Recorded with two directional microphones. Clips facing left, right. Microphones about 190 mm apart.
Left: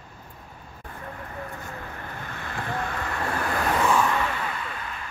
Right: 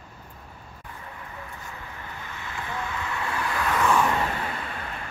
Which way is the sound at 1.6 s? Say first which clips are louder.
Left 3 dB; 50° left (ahead or behind).